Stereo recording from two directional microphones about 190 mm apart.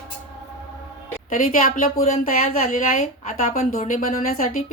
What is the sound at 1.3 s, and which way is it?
A woman's voice, 40° left (ahead or behind).